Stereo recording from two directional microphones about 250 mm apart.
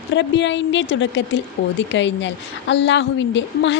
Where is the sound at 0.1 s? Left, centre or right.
Left.